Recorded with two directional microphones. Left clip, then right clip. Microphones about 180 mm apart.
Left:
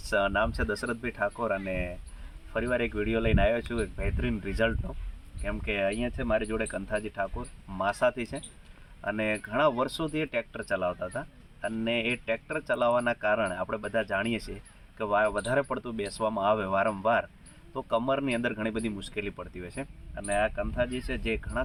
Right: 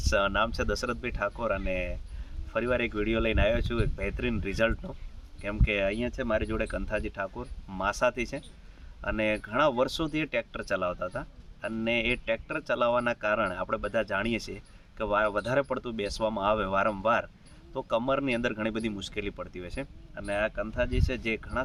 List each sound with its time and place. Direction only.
0.1 s speech: 20° right (ahead or behind)